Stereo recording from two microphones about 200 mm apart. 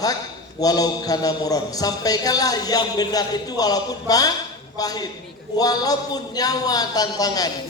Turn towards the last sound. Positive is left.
turn(degrees=20)  # may be behind; listen again after turning